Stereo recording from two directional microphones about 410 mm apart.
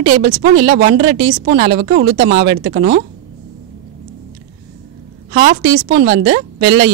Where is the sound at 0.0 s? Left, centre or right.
Right.